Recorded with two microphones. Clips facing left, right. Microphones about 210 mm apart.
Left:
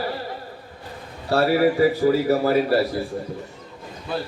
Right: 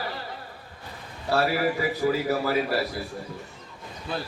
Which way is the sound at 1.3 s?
30° left (ahead or behind).